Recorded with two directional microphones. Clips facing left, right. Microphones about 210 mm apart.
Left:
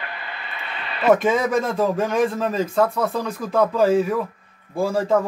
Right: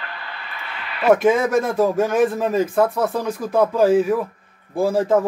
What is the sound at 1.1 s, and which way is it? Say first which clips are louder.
Speech: right 2 dB; 10° right (ahead or behind).